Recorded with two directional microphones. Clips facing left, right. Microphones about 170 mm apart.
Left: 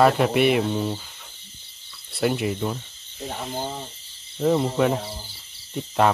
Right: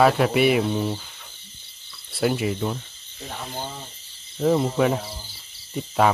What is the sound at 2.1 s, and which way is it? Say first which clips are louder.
Speech: even; centre (ahead or behind).